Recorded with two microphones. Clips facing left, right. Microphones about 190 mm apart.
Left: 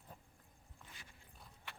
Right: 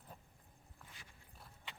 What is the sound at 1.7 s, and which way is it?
Clip-clop, 15° right (ahead or behind).